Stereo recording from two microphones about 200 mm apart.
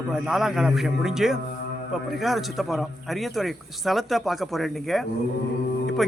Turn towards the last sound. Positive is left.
turn(degrees=0)  # may be behind; listen again after turning